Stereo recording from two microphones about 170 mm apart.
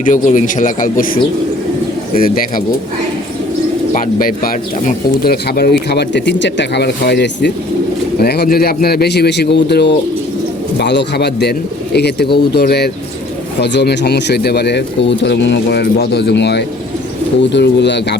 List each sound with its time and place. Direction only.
0.0 s speech: 45° left (ahead or behind)
3.9 s speech: 55° left (ahead or behind); by 7.5 s 85° left
8.2 s speech: 65° left (ahead or behind)
13.6 s speech: 85° left